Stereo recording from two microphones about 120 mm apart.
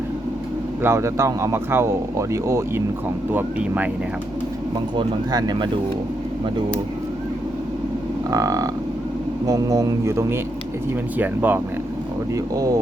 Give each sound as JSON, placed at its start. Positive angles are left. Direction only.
{"t": 0.8, "sound": "speech", "side_deg": -20}
{"t": 3.3, "sound": "speech", "side_deg": -15}
{"t": 4.9, "sound": "speech", "side_deg": -35}
{"t": 8.3, "sound": "speech", "side_deg": -25}
{"t": 12.3, "sound": "speech", "side_deg": -30}